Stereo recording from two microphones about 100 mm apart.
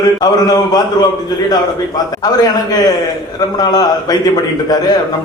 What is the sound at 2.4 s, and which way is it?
A man's voice, 40° left (ahead or behind).